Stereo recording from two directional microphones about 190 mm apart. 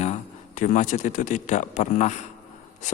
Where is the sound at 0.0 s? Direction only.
40° left (ahead or behind).